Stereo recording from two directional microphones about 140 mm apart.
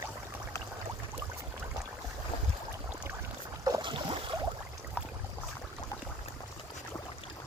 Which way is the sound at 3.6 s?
30° right (ahead or behind).